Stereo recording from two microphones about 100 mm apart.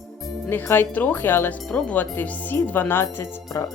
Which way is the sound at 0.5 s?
20° left (ahead or behind).